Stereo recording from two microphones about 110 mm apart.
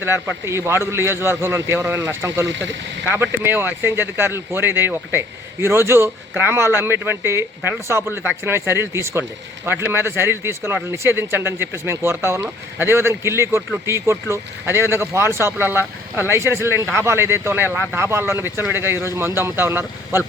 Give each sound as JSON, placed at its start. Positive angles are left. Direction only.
{"t": 0.0, "sound": "a man's voice", "side_deg": -20}